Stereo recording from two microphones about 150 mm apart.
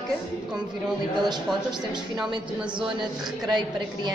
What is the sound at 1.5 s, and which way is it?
Speech, 5° right (ahead or behind).